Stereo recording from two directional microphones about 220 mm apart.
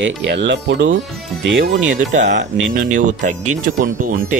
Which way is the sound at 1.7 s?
35° right (ahead or behind).